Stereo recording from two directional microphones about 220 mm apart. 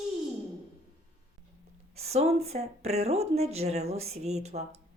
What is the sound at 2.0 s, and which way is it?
A woman's voice, 30° right (ahead or behind).